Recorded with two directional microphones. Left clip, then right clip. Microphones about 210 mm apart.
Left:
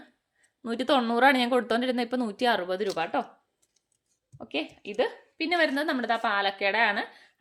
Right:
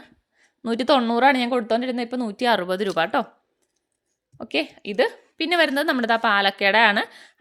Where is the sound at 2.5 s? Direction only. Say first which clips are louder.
Right 6 dB; 30° right (ahead or behind).